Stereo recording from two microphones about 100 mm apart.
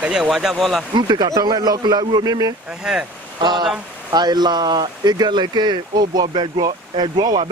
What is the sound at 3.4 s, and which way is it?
Speech, 45° right (ahead or behind).